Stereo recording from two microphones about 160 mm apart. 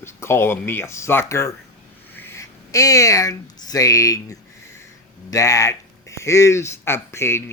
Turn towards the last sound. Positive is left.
turn(degrees=15)  # may be behind; listen again after turning